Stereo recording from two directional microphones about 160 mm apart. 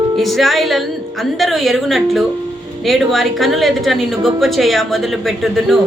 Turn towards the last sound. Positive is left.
turn(degrees=0)  # may be behind; listen again after turning